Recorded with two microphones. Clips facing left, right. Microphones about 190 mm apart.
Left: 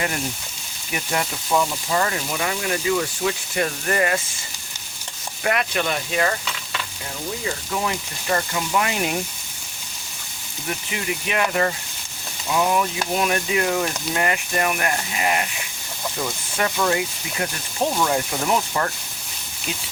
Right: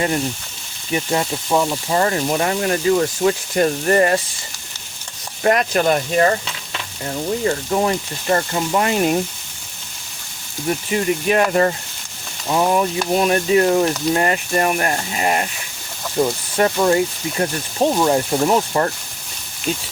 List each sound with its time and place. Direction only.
0.9 s speech: 30° right (ahead or behind)
5.4 s speech: 40° right (ahead or behind)
10.9 s speech: 40° right (ahead or behind)